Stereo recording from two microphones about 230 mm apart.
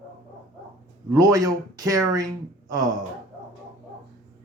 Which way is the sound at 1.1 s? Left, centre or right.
Centre.